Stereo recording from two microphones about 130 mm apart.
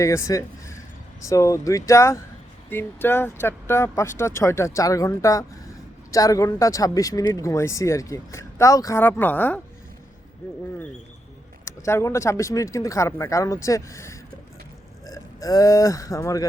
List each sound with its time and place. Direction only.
0.0 s speech: 25° left (ahead or behind)
11.6 s speech: 20° left (ahead or behind)